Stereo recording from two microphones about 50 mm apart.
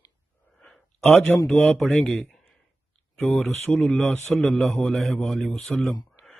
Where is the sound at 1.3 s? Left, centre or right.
Centre.